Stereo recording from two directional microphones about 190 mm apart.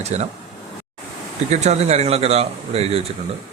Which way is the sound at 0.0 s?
35° right (ahead or behind).